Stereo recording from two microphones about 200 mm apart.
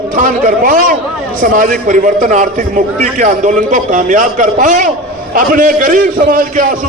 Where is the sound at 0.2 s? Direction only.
40° right (ahead or behind).